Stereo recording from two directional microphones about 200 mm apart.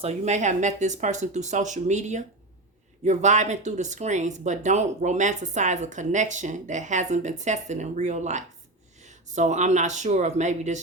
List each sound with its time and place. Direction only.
0.0 s speech: 35° right (ahead or behind)